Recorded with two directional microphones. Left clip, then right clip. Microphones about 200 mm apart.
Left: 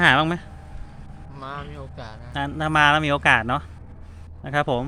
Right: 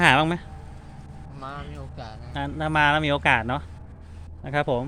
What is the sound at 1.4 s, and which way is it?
A man's voice, 25° left (ahead or behind).